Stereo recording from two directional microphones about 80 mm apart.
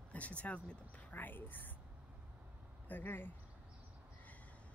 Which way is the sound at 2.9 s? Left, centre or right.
Left.